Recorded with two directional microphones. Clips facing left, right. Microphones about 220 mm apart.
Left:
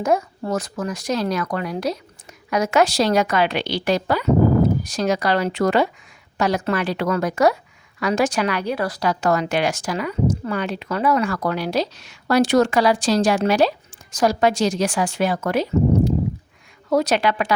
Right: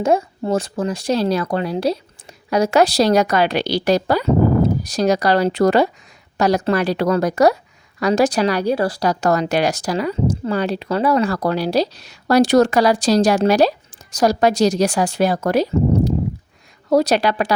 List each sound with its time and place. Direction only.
0.0 s a woman's voice: 30° right (ahead or behind)